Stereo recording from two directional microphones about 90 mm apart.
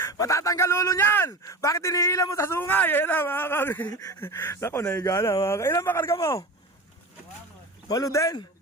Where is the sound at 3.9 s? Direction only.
40° left (ahead or behind).